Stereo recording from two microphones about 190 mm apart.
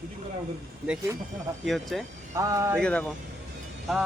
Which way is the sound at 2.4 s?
15° right (ahead or behind).